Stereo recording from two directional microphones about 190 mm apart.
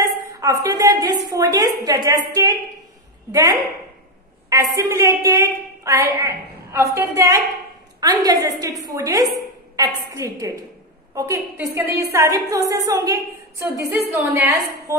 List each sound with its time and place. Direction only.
0.0 s a sound: 15° right (ahead or behind)
0.7 s a woman's voice: 20° right (ahead or behind)
3.3 s a woman's voice: 20° right (ahead or behind)